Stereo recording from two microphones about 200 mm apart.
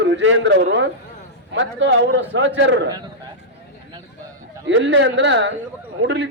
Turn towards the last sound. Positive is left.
turn(degrees=-60)  # may be behind; listen again after turning